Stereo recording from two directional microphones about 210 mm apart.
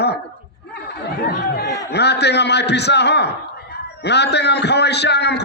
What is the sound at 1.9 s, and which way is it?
A man's voice, 50° left (ahead or behind).